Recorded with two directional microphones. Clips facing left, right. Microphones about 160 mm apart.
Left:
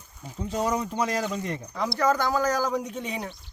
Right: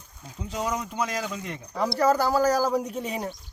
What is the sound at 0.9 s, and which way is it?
Speech, 5° right (ahead or behind).